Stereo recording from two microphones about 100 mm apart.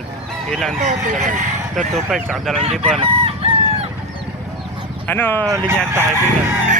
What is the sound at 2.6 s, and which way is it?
Speech, 90° right.